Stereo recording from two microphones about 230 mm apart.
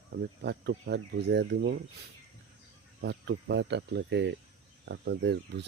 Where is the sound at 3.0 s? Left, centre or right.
Right.